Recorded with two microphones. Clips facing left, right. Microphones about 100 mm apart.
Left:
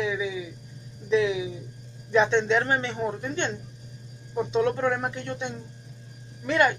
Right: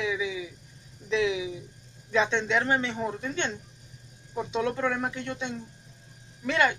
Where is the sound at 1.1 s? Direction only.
35° left (ahead or behind).